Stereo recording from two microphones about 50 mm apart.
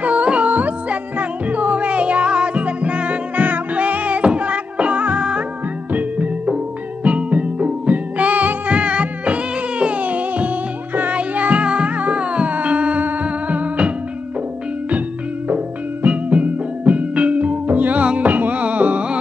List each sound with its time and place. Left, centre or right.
0.0 s music: right
15.4 s music: right